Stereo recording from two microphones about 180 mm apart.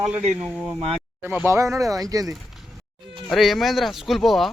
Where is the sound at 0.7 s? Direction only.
30° right (ahead or behind).